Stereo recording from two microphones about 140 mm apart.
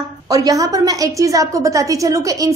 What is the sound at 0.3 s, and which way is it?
A woman's voice, 25° right (ahead or behind).